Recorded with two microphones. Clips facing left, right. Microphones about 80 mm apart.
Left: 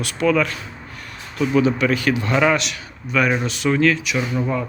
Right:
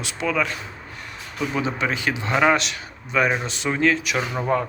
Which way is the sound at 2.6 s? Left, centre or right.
Right.